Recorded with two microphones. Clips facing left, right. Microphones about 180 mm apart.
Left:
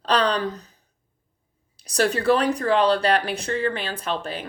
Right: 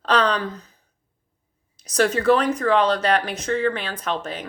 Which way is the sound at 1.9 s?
35° left (ahead or behind).